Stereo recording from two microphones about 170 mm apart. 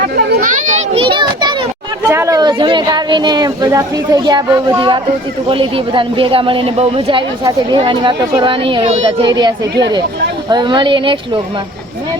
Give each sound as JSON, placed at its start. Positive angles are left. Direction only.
{"t": 0.4, "sound": "children playing", "side_deg": -45}
{"t": 1.0, "sound": "children playing", "side_deg": -25}
{"t": 2.0, "sound": "a woman's voice", "side_deg": -15}